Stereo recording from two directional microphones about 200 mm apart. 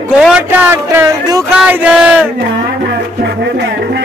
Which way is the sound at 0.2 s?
5° right (ahead or behind).